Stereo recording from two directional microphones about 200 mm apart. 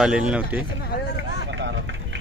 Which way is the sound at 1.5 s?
65° right (ahead or behind).